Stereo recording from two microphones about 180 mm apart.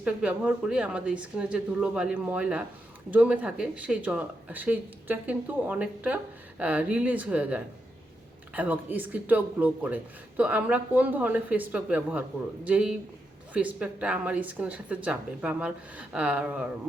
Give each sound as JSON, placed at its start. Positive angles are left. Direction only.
{"t": 0.0, "sound": "speech", "side_deg": -5}